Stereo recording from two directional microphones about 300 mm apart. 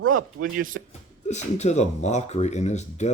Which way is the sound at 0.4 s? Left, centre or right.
Right.